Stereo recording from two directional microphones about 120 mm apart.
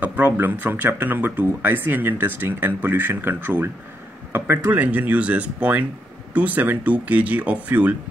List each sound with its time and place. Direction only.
0.0 s speech: 15° right (ahead or behind)